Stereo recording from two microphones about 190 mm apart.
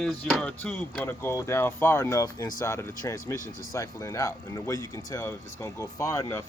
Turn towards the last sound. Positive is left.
turn(degrees=15)  # may be behind; listen again after turning